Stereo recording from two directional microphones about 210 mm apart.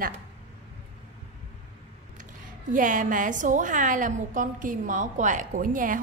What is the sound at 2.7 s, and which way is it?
A woman's voice, 40° right (ahead or behind).